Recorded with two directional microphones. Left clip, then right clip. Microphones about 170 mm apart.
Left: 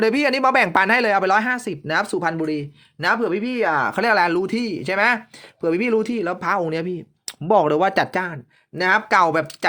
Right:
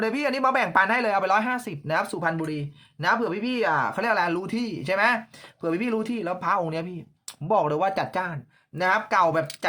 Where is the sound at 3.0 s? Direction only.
45° left (ahead or behind).